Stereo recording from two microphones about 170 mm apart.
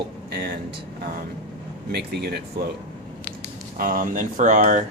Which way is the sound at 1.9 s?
70° right (ahead or behind).